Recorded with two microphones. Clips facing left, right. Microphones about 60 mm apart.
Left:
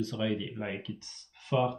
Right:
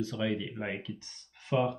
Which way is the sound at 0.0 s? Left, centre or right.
Right.